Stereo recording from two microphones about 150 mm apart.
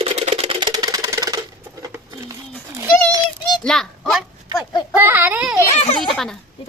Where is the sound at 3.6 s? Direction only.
5° left (ahead or behind).